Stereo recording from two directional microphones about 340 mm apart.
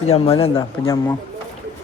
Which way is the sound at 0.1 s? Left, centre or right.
Centre.